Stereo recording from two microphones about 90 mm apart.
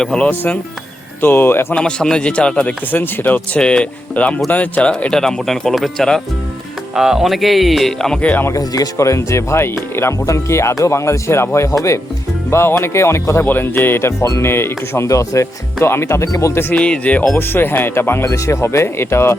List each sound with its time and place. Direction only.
0.0 s speech: 10° left (ahead or behind)
0.3 s speech: 20° left (ahead or behind)
1.7 s a man's voice: 10° left (ahead or behind)
8.4 s speech: 40° left (ahead or behind)
16.7 s speech: 10° left (ahead or behind); by 19.4 s 30° left (ahead or behind)